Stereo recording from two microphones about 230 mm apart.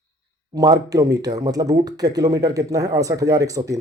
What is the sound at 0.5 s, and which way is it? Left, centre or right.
Speech, centre.